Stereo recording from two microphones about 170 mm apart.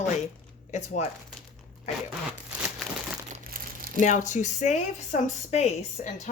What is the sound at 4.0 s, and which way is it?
Speech, 45° left (ahead or behind).